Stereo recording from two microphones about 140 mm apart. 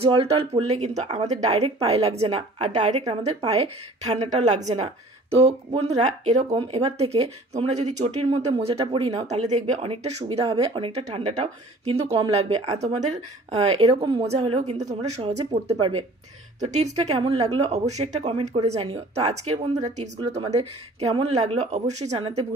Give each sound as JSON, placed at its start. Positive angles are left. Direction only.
{"t": 0.0, "sound": "speech", "side_deg": -45}
{"t": 6.5, "sound": "speech", "side_deg": -45}